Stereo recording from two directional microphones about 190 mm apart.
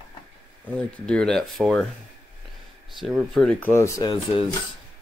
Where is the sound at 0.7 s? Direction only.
5° left (ahead or behind).